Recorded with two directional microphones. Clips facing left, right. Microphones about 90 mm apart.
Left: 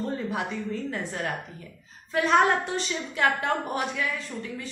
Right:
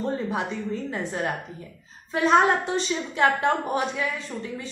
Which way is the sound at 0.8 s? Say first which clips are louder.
Right 3 dB; 20° right (ahead or behind).